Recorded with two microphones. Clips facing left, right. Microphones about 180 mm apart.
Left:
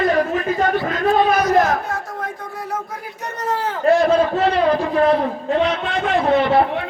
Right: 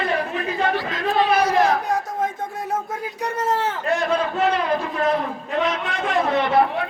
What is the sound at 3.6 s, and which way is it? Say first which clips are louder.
A man's voice: left 7 dB; 35° left (ahead or behind).